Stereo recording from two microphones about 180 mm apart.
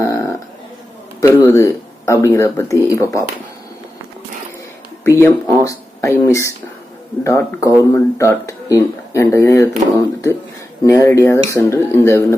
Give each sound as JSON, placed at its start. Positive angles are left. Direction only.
{"t": 0.0, "sound": "a sound", "side_deg": 15}
{"t": 1.5, "sound": "speech", "side_deg": 15}
{"t": 5.2, "sound": "speech", "side_deg": 15}